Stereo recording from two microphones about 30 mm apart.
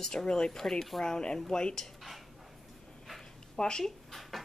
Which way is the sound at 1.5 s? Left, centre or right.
Left.